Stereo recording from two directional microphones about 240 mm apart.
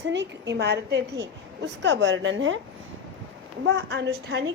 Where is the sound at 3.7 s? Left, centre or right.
Right.